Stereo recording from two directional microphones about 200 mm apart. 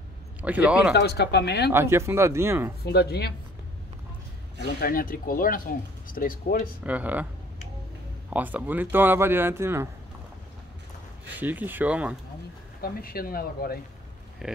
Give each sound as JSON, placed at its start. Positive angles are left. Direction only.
{"t": 0.4, "sound": "speech", "side_deg": -5}
{"t": 0.9, "sound": "speech", "side_deg": 55}
{"t": 1.7, "sound": "speech", "side_deg": -10}
{"t": 2.8, "sound": "speech", "side_deg": 55}
{"t": 4.7, "sound": "speech", "side_deg": 45}
{"t": 6.8, "sound": "speech", "side_deg": -5}
{"t": 8.3, "sound": "speech", "side_deg": -10}
{"t": 11.2, "sound": "speech", "side_deg": -10}
{"t": 12.8, "sound": "speech", "side_deg": 50}
{"t": 14.4, "sound": "speech", "side_deg": 0}